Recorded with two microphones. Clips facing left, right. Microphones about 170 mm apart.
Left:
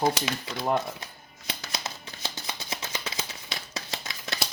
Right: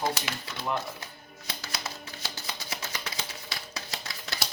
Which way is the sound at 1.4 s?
20° left (ahead or behind).